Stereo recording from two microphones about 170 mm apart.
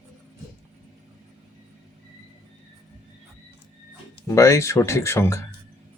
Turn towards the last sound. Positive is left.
turn(degrees=15)  # may be behind; listen again after turning